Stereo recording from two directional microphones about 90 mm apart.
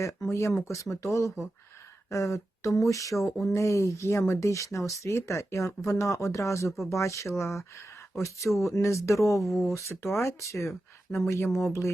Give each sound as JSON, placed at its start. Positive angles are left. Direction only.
{"t": 0.0, "sound": "speech", "side_deg": 35}